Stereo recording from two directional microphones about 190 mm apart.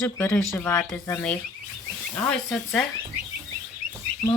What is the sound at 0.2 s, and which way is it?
Speech, 10° left (ahead or behind).